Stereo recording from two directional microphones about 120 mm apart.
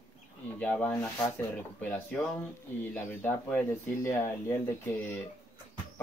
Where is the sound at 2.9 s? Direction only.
15° left (ahead or behind).